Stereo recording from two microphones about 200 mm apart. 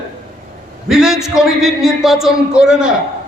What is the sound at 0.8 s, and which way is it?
A man's voice, centre (ahead or behind).